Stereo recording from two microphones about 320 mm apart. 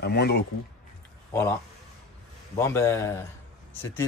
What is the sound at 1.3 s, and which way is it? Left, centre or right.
Speech, centre.